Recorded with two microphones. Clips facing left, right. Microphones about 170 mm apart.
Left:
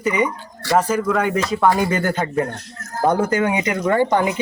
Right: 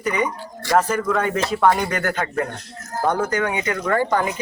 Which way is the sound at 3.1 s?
25° left (ahead or behind).